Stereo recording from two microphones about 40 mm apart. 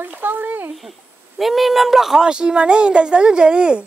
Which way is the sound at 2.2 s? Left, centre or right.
Right.